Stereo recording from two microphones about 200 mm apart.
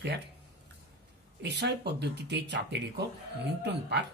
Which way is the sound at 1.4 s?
55° right (ahead or behind).